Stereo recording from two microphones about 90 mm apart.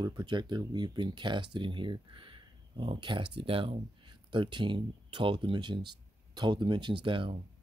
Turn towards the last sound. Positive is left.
turn(degrees=-65)  # may be behind; listen again after turning